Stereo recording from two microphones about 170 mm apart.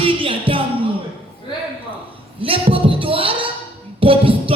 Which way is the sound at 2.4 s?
30° right (ahead or behind).